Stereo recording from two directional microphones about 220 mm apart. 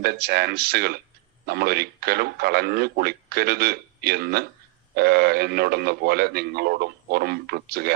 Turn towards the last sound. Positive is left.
turn(degrees=-45)  # may be behind; listen again after turning